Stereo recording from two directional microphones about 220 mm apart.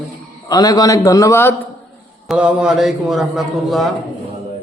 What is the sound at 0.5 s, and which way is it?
A man's voice, 15° left (ahead or behind).